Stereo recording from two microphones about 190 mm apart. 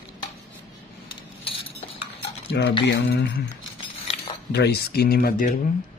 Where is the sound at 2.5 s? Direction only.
60° left (ahead or behind).